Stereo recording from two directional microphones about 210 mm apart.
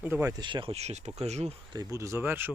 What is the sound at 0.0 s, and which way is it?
Speech, 10° right (ahead or behind).